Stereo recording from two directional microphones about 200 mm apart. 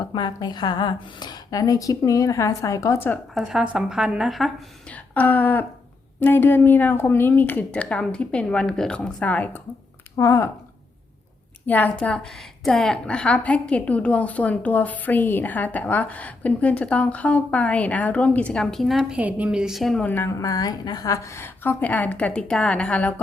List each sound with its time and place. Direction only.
0.0 s a woman's voice: 20° left (ahead or behind)
3.3 s a woman's voice: 5° right (ahead or behind); by 10.5 s 15° left (ahead or behind)
11.6 s a woman's voice: 10° left (ahead or behind)